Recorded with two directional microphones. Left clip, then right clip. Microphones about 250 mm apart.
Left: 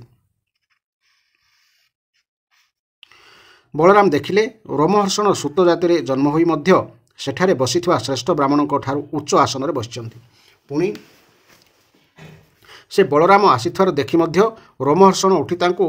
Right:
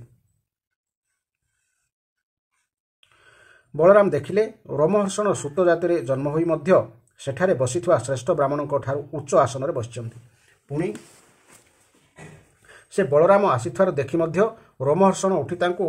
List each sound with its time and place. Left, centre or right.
3.2 s speech: left
12.6 s speech: left